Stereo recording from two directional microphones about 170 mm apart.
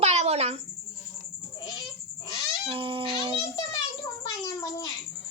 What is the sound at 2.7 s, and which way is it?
Babbling, 30° right (ahead or behind).